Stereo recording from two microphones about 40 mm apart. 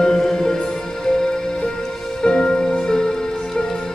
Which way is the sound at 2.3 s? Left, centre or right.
Centre.